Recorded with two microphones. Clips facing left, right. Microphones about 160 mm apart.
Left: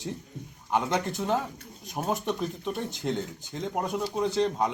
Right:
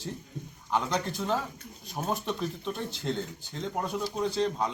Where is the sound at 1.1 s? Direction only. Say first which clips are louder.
Left 2 dB; 20° left (ahead or behind).